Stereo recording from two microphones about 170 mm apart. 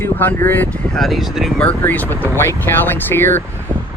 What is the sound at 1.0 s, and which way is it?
Speech, centre (ahead or behind).